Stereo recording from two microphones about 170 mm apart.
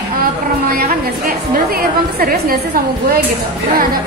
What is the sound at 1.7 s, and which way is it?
Speech, 60° right (ahead or behind).